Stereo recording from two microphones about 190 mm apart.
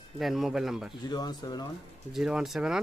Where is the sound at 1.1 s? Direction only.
20° left (ahead or behind).